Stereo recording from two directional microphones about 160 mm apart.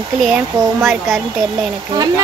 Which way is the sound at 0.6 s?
15° right (ahead or behind).